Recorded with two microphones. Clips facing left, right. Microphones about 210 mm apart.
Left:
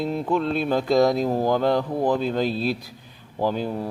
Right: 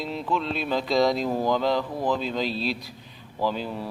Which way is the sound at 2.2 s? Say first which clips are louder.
Left 4 dB; 50° left (ahead or behind).